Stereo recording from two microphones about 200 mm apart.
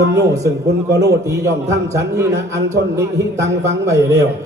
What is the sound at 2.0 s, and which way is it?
A man's voice, 15° right (ahead or behind).